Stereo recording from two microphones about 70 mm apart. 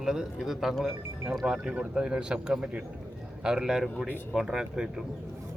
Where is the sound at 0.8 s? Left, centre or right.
Right.